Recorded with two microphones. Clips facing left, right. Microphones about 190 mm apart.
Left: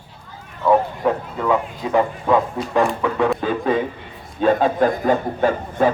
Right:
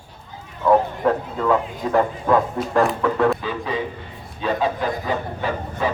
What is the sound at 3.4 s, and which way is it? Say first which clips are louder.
Speech: left 6 dB; 50° left (ahead or behind).